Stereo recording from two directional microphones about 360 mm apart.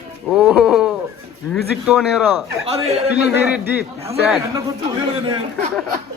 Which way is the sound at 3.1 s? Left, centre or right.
Centre.